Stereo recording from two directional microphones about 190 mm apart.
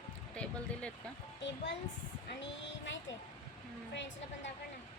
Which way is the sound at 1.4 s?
65° left (ahead or behind).